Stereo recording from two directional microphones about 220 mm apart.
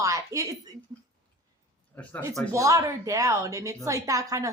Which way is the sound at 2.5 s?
15° right (ahead or behind).